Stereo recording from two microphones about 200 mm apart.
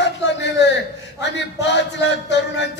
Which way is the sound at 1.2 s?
60° left (ahead or behind).